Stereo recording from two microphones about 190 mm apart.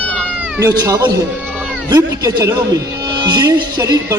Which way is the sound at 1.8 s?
20° right (ahead or behind).